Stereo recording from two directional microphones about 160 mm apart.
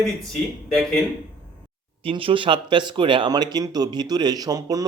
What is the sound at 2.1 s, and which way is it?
Speech, 35° right (ahead or behind).